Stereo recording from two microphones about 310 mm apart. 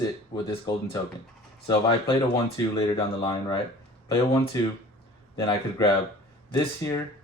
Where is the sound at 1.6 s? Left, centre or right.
Centre.